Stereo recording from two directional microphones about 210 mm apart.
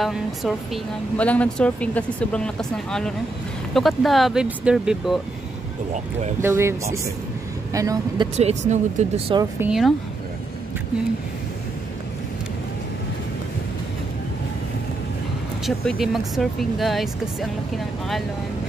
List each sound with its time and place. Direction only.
0.0 s speech: centre (ahead or behind)
6.4 s speech: 10° right (ahead or behind)
8.4 s speech: 30° right (ahead or behind)
9.3 s speech: 15° right (ahead or behind)
9.7 s speech: centre (ahead or behind)
15.6 s speech: centre (ahead or behind)